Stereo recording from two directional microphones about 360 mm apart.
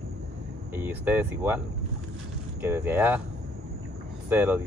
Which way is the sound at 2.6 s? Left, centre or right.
Centre.